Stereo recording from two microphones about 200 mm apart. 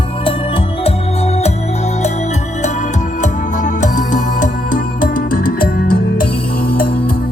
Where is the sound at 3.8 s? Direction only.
40° left (ahead or behind).